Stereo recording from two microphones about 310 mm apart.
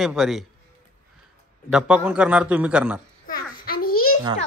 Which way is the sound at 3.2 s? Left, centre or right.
Left.